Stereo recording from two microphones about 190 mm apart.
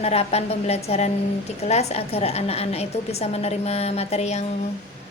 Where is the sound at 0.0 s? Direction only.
35° left (ahead or behind).